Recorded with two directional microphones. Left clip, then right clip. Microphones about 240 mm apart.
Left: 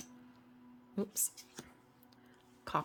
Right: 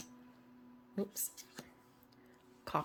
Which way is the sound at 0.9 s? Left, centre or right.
Centre.